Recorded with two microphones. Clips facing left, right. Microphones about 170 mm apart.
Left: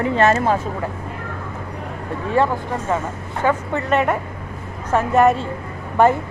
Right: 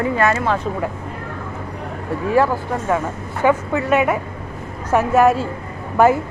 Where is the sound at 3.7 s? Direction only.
5° right (ahead or behind).